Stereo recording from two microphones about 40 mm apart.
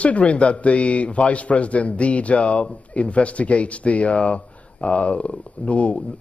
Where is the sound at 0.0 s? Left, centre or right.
Left.